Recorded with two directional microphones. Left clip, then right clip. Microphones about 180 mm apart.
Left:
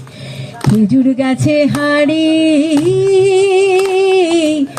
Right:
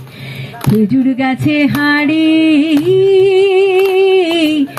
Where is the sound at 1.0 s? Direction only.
65° left (ahead or behind).